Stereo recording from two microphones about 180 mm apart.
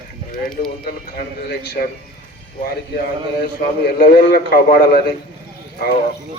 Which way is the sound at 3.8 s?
65° left (ahead or behind).